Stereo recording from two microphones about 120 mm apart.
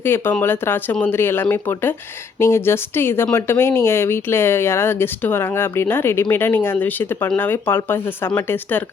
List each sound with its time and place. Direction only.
0.0 s speech: 20° left (ahead or behind)